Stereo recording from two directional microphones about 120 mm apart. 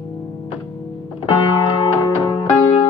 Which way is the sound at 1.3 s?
40° left (ahead or behind).